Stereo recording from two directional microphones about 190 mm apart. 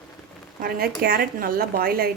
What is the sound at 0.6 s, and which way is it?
Speech, 50° right (ahead or behind).